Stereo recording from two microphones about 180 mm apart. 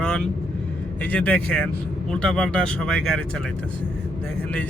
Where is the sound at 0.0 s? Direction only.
5° left (ahead or behind).